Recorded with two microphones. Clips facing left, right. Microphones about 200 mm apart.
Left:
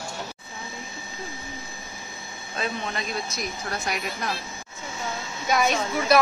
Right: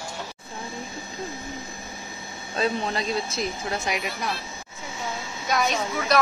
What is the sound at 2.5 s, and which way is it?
Speech, 35° right (ahead or behind).